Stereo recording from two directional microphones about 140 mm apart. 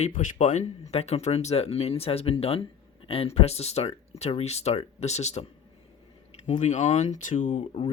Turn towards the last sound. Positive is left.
turn(degrees=60)  # may be behind; listen again after turning